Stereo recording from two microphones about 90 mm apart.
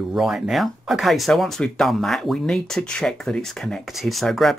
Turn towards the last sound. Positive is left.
turn(degrees=0)  # may be behind; listen again after turning